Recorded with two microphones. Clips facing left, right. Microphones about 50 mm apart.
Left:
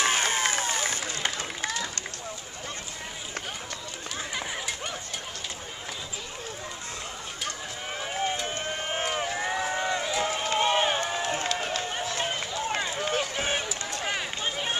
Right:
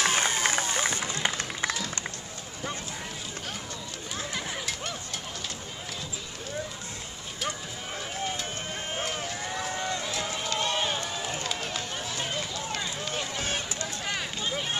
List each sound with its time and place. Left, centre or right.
0.0 s run: centre
0.7 s run: right
4.3 s a sound: centre
8.0 s run: left